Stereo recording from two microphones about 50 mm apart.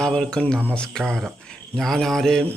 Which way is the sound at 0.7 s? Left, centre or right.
Centre.